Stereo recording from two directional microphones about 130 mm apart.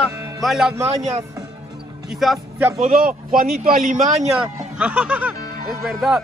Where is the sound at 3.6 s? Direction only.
90° right; by 4.3 s 70° right (ahead or behind).